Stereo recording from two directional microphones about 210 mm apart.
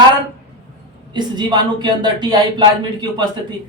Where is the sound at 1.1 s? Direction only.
20° right (ahead or behind).